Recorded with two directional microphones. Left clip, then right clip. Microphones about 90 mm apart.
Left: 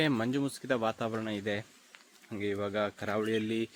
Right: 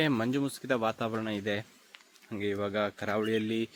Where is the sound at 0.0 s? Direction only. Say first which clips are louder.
Right 1 dB; 10° right (ahead or behind).